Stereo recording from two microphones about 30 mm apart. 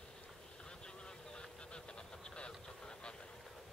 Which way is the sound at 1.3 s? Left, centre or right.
Left.